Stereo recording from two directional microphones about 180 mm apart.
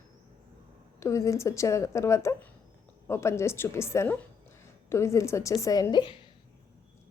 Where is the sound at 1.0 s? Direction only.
15° left (ahead or behind).